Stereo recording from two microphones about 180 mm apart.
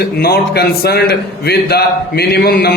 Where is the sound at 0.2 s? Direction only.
60° left (ahead or behind).